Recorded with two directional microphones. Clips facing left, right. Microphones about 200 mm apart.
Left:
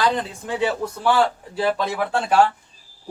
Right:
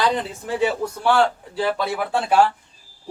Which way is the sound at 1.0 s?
5° left (ahead or behind).